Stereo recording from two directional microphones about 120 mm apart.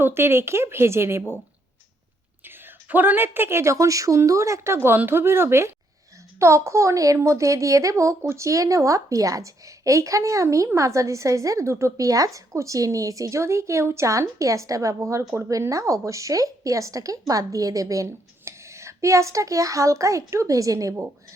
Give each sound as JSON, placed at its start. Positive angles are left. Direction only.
{"t": 0.0, "sound": "a woman's voice", "side_deg": -20}
{"t": 2.9, "sound": "a woman's voice", "side_deg": -15}